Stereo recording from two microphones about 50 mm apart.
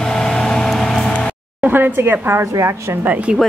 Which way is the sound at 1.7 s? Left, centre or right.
Right.